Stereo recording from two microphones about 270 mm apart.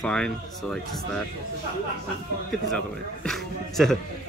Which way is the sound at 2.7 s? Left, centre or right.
Centre.